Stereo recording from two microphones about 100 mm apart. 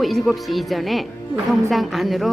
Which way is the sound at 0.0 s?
Centre (ahead or behind).